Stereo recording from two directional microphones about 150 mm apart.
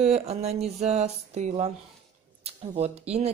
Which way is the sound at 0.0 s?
45° right (ahead or behind).